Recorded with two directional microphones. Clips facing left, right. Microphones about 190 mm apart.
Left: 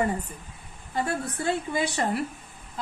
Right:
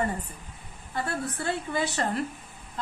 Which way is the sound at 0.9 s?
15° left (ahead or behind).